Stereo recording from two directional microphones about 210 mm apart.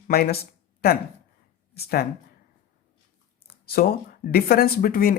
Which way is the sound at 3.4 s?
45° left (ahead or behind).